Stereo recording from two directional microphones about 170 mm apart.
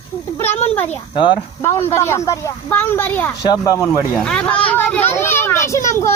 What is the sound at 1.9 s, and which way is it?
A child's voice, 15° left (ahead or behind).